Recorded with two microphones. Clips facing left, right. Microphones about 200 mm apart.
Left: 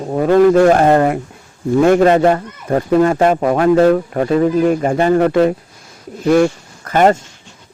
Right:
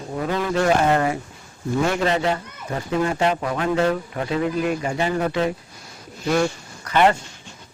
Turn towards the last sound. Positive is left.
turn(degrees=45)  # may be behind; listen again after turning